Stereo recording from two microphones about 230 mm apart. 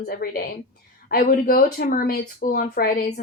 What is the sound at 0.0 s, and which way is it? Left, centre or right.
Speech, left.